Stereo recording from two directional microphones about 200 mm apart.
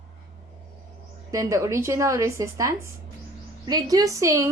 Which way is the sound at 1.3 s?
15° right (ahead or behind).